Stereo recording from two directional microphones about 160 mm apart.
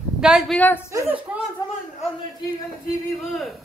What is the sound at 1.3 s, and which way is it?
Speech, 10° right (ahead or behind).